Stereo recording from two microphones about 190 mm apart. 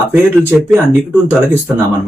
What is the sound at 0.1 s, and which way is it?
Speech, 10° right (ahead or behind).